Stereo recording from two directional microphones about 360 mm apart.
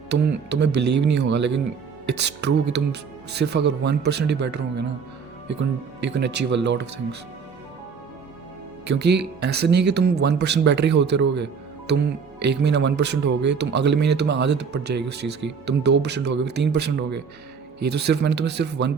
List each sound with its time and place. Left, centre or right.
0.7 s speech: right
1.0 s speech: right
8.9 s speech: right